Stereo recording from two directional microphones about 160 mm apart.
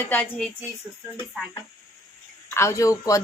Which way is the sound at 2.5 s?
20° left (ahead or behind).